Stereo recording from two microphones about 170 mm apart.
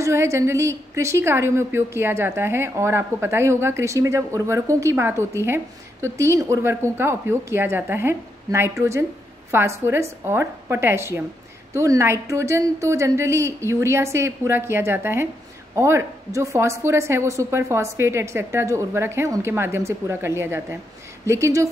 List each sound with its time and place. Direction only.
0.0 s a woman's voice: 15° right (ahead or behind)